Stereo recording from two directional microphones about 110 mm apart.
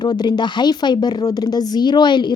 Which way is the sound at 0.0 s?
40° left (ahead or behind).